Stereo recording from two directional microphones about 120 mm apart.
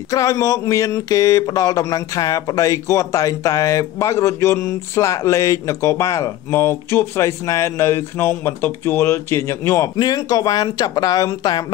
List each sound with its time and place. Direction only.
0.1 s speech: 30° left (ahead or behind)